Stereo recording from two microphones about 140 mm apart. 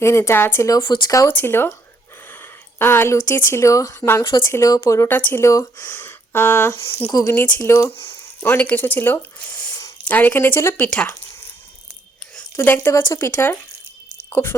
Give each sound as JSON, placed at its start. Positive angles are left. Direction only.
{"t": 0.0, "sound": "speech", "side_deg": 20}
{"t": 0.8, "sound": "speech", "side_deg": 35}
{"t": 1.3, "sound": "speech", "side_deg": 15}
{"t": 7.3, "sound": "speech", "side_deg": 10}
{"t": 10.1, "sound": "speech", "side_deg": 10}
{"t": 12.4, "sound": "speech", "side_deg": 15}